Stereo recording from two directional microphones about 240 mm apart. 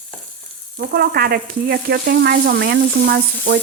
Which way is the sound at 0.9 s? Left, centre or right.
Right.